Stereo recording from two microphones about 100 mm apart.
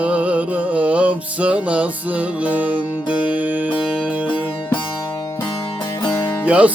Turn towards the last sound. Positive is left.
turn(degrees=-15)  # may be behind; listen again after turning